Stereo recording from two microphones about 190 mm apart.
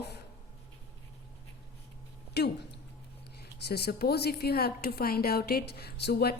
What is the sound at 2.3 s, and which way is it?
Speech, 60° left (ahead or behind).